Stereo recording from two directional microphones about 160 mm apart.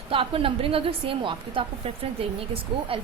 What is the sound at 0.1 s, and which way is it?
A woman's voice, 35° right (ahead or behind).